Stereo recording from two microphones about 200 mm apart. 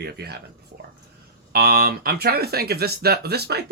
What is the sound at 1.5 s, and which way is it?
Speech, 50° right (ahead or behind).